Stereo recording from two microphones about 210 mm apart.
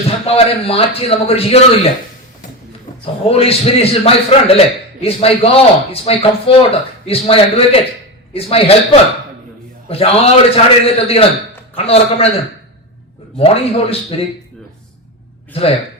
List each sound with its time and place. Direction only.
0.3 s speech: 25° left (ahead or behind)
3.2 s speech: 30° left (ahead or behind)
13.3 s speech: 30° left (ahead or behind)
15.5 s speech: 30° left (ahead or behind)